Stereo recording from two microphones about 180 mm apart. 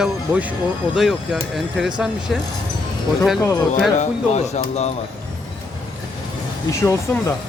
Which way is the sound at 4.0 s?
40° left (ahead or behind).